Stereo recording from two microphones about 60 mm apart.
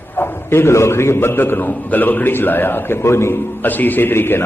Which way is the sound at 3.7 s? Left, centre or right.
Left.